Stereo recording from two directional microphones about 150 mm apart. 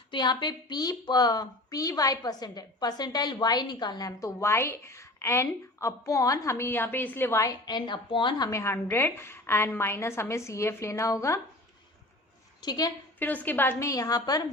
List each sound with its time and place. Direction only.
0.1 s a woman's voice: 30° left (ahead or behind)
8.4 s a woman's voice: 20° left (ahead or behind)
12.6 s a woman's voice: 25° left (ahead or behind)
13.1 s a woman's voice: 10° left (ahead or behind)